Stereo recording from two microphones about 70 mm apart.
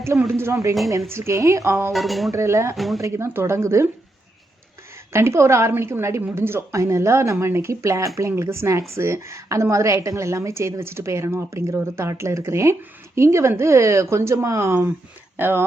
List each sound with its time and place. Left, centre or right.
0.2 s a woman's voice: right
1.9 s speech: centre
2.3 s a woman's voice: right
2.7 s speech: centre
3.0 s a woman's voice: right
5.1 s a woman's voice: right